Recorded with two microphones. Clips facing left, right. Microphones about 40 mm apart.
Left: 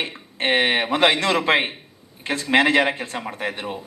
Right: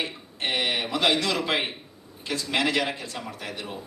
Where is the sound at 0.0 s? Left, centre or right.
Left.